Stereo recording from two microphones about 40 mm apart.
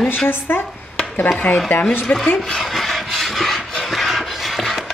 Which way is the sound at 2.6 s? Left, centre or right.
Centre.